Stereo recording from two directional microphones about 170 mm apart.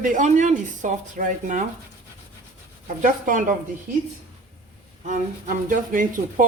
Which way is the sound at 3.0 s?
50° right (ahead or behind).